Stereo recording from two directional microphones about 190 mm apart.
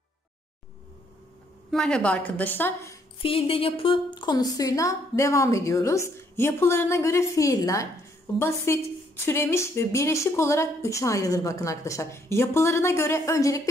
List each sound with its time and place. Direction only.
1.7 s a woman's voice: 5° left (ahead or behind)
3.2 s a woman's voice: 30° left (ahead or behind)